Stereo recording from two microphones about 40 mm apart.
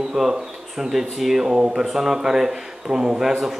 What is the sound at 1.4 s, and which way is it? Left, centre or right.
A woman's voice, centre.